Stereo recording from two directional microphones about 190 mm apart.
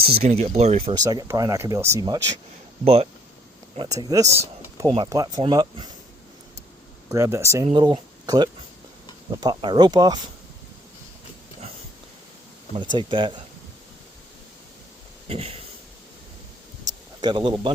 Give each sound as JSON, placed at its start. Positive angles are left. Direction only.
{"t": 0.0, "sound": "speech", "side_deg": -30}
{"t": 2.8, "sound": "speech", "side_deg": -30}
{"t": 3.8, "sound": "speech", "side_deg": -20}
{"t": 7.1, "sound": "speech", "side_deg": -15}
{"t": 12.7, "sound": "speech", "side_deg": -25}
{"t": 15.3, "sound": "speech", "side_deg": -30}
{"t": 17.2, "sound": "speech", "side_deg": -25}